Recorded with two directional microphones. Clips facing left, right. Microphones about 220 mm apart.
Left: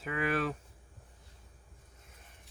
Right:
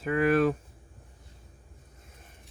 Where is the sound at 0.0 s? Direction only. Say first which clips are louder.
Right 9 dB; 45° right (ahead or behind).